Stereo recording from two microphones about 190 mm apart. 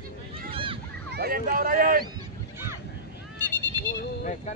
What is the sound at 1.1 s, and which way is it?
Speech, 55° right (ahead or behind).